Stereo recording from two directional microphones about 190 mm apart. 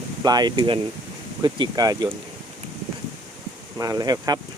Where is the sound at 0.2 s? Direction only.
20° right (ahead or behind).